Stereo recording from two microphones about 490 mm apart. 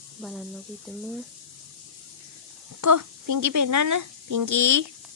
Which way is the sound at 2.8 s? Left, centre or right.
Right.